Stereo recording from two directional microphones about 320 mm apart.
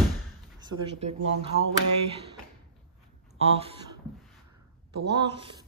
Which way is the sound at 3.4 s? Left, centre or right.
Centre.